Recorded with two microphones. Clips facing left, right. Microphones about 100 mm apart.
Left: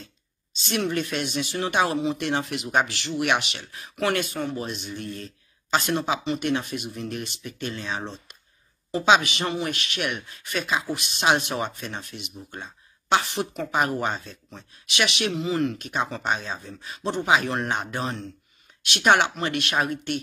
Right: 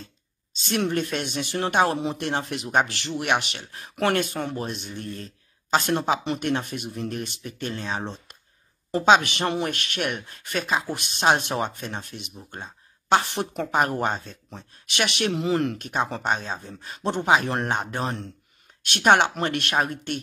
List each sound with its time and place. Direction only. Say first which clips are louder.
0.6 s speech: right 1 dB; 45° right (ahead or behind)
2.7 s speech: right 1 dB; 50° right (ahead or behind)
9.2 s speech: right 2 dB; 55° right (ahead or behind); by 20.2 s 40° right (ahead or behind)